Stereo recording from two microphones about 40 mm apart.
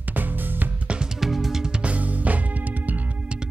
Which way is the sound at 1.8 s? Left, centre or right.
Right.